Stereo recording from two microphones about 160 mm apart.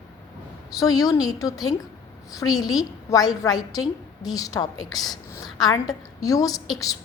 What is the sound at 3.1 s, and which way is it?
A woman's voice, 25° left (ahead or behind).